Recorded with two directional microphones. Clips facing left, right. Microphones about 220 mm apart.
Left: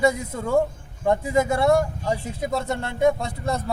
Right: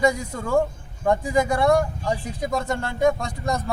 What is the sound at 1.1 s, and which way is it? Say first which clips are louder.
A man's voice: even; 25° left (ahead or behind).